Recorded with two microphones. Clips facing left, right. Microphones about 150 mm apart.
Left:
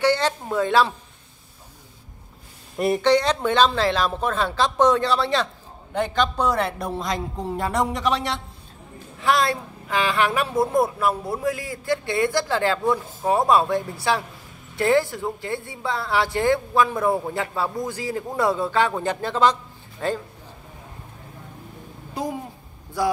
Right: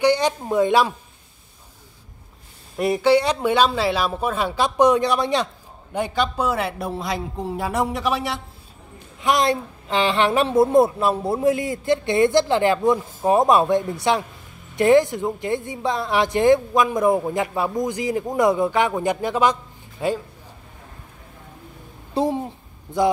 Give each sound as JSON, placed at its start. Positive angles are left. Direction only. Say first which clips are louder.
{"t": 0.0, "sound": "speech", "louder": "right 2 dB", "side_deg": -15}
{"t": 2.8, "sound": "a woman's voice", "louder": "right 1 dB", "side_deg": -5}
{"t": 9.2, "sound": "a woman's voice", "louder": "right 2 dB", "side_deg": -20}
{"t": 22.1, "sound": "a woman's voice", "louder": "right 7 dB", "side_deg": -30}